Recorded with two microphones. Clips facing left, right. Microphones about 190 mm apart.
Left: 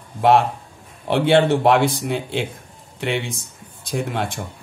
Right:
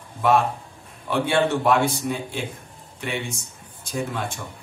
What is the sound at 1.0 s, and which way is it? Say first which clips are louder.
Speech: left 5 dB; 65° left (ahead or behind).